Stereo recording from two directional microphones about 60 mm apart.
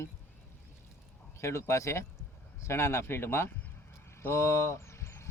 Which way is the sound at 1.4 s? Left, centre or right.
Left.